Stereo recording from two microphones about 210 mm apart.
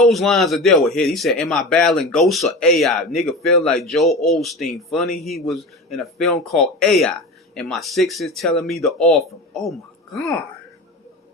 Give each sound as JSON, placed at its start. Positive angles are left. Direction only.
{"t": 0.0, "sound": "speech", "side_deg": 0}